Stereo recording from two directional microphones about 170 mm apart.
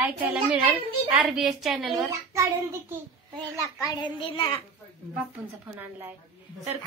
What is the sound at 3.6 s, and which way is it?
Speech, 20° left (ahead or behind).